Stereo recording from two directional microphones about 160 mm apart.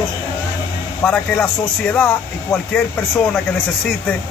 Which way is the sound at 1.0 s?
5° left (ahead or behind).